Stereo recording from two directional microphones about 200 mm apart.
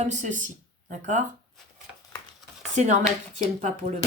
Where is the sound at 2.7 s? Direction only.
35° right (ahead or behind).